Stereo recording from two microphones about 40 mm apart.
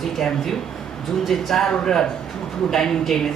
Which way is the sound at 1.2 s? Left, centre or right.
Centre.